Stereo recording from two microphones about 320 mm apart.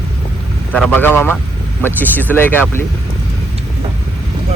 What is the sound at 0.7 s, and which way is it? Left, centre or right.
Speech, centre.